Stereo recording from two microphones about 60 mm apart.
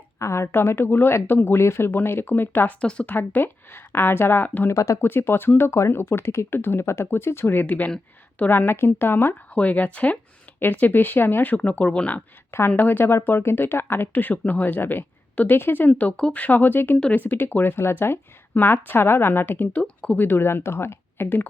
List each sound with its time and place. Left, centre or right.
0.2 s speech: left
0.9 s speech: left
1.5 s speech: left
2.8 s speech: left
3.2 s speech: left
4.4 s speech: left
4.7 s speech: left
4.9 s speech: left
11.5 s speech: left
12.5 s speech: left
16.0 s speech: centre
16.4 s speech: left
19.7 s speech: left
20.1 s speech: left